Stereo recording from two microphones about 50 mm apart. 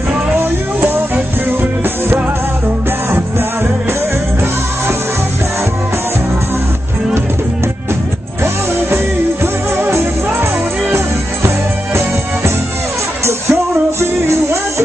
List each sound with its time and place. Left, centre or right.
0.4 s music: right
8.9 s music: right
13.2 s music: right